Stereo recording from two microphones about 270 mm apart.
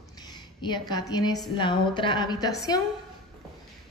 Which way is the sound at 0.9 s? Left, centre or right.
Centre.